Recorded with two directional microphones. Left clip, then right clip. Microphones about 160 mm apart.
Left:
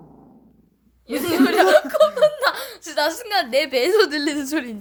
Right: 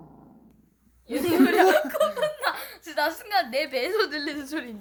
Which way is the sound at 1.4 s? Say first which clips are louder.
Left 6 dB; 85° left.